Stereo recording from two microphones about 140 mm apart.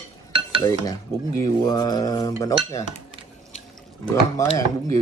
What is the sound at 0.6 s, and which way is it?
Speech, 25° left (ahead or behind).